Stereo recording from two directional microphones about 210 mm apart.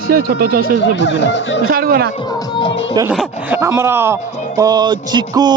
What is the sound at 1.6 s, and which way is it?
Speech, 45° right (ahead or behind).